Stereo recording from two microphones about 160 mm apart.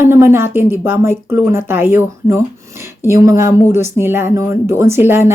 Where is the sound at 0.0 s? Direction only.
15° right (ahead or behind).